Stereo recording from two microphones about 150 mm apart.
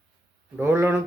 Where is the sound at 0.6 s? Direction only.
15° right (ahead or behind).